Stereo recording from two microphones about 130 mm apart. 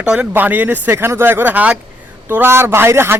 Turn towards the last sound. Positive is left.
turn(degrees=-20)  # may be behind; listen again after turning